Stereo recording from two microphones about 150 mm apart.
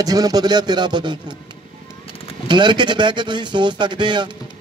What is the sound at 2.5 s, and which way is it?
Speech, 30° right (ahead or behind).